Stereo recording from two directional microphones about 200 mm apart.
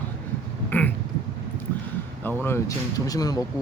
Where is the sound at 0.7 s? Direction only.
10° left (ahead or behind).